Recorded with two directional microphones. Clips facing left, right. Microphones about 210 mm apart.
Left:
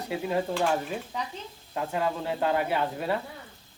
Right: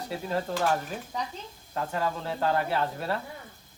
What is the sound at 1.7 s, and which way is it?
Speech, 15° left (ahead or behind).